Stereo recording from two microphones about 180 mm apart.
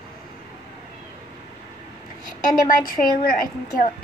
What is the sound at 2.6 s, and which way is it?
A woman's voice, 50° left (ahead or behind).